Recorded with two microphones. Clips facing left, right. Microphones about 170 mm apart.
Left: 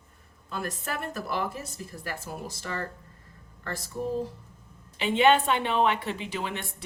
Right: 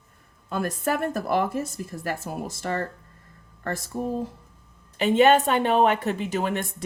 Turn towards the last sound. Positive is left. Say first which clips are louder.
# right 7 dB
turn(degrees=-45)  # may be behind; listen again after turning